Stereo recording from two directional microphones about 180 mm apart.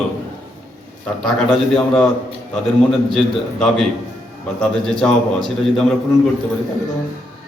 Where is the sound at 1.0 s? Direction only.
5° left (ahead or behind).